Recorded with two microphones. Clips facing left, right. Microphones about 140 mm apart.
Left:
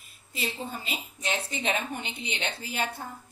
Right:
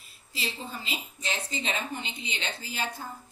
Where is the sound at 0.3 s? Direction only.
55° left (ahead or behind).